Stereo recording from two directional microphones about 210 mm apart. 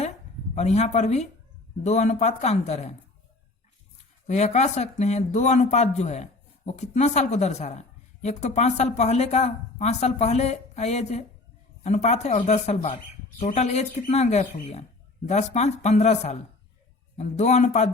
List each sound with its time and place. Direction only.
0.5 s a woman's voice: 30° left (ahead or behind)
4.3 s a woman's voice: 35° left (ahead or behind)